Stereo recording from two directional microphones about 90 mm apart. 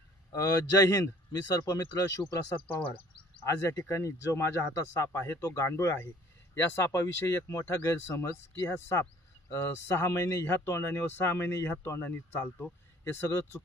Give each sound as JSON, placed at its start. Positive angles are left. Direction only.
{"t": 0.4, "sound": "speech", "side_deg": 40}
{"t": 3.4, "sound": "speech", "side_deg": 35}